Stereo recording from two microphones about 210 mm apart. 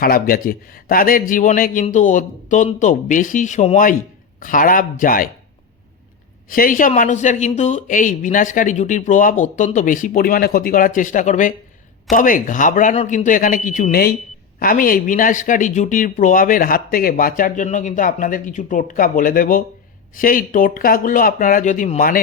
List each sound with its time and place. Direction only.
0.0 s a man's voice: 45° left (ahead or behind)
6.5 s speech: 40° left (ahead or behind)